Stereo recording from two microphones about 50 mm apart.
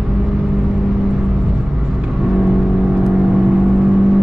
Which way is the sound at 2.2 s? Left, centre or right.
Centre.